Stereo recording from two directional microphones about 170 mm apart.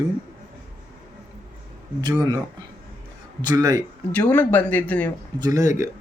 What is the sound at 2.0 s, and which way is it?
Speech, 25° right (ahead or behind).